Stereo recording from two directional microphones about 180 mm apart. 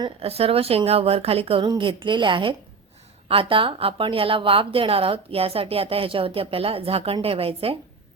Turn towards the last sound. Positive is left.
turn(degrees=-30)  # may be behind; listen again after turning